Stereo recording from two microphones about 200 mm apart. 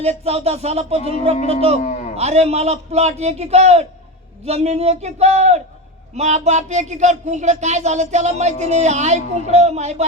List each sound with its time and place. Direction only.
0.0 s speech: 30° right (ahead or behind)
1.8 s a man's voice: 40° left (ahead or behind)
2.1 s speech: 35° right (ahead or behind)